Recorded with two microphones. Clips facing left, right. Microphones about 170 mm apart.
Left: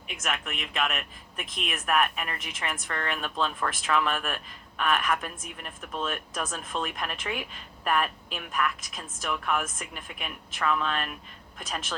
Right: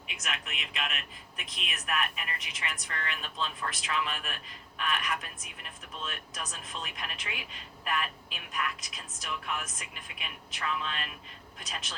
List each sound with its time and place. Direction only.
0.2 s speech: 50° left (ahead or behind)